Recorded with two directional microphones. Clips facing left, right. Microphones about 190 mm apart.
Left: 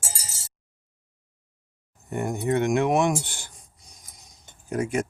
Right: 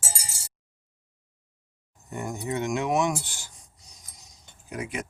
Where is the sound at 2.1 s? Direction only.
60° left (ahead or behind).